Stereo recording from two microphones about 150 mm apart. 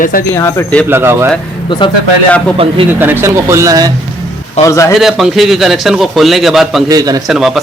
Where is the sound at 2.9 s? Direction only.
15° right (ahead or behind).